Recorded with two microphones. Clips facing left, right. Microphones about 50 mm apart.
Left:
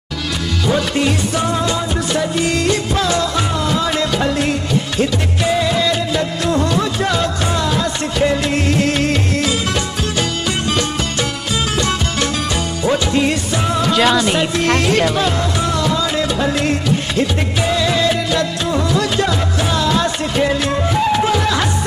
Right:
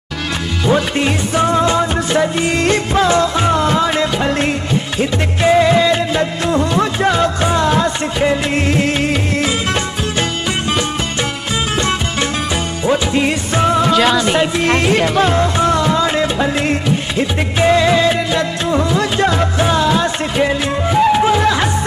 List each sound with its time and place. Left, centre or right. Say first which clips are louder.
0.7 s music: right 2 dB; right
8.2 s music of bollywood: even; right
11.8 s music: right 1 dB; right
13.9 s a man's voice: right 1 dB; centre
14.4 s music: right 2 dB; centre; by 16.3 s right
16.3 s music: right 1 dB; right